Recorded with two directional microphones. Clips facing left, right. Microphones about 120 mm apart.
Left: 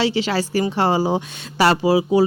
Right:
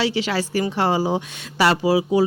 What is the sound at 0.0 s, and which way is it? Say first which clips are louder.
A woman's voice: left 2 dB; 30° left (ahead or behind).